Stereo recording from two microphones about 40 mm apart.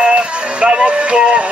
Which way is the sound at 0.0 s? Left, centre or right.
Right.